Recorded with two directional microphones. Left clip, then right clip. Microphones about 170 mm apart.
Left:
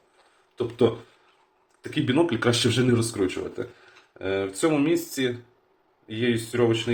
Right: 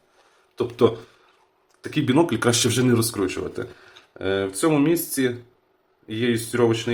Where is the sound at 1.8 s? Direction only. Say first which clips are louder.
Right 3 dB; 25° right (ahead or behind).